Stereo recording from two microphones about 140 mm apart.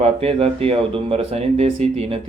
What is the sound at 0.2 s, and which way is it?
Speech, 45° right (ahead or behind).